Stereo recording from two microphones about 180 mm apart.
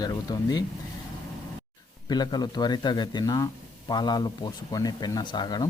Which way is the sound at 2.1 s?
20° left (ahead or behind).